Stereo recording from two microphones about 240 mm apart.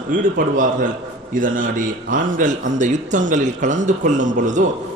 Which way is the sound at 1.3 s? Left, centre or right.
Right.